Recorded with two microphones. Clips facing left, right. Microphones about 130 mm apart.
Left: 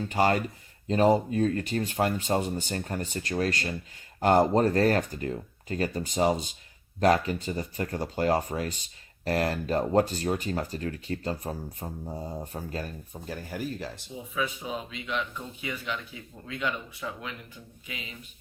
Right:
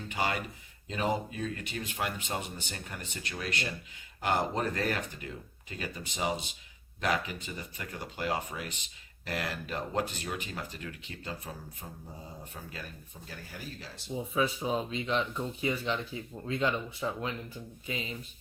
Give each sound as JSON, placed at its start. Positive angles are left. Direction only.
{"t": 0.1, "sound": "speech", "side_deg": 45}
{"t": 14.3, "sound": "speech", "side_deg": -35}